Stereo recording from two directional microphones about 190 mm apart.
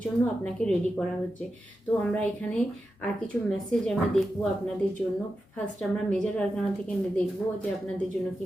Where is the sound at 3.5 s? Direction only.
5° left (ahead or behind).